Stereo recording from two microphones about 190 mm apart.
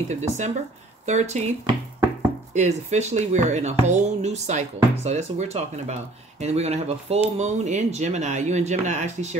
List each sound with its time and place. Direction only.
0.1 s speech: 40° right (ahead or behind)
2.5 s speech: 40° right (ahead or behind)